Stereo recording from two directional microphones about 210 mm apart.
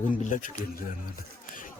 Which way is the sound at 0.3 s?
40° left (ahead or behind).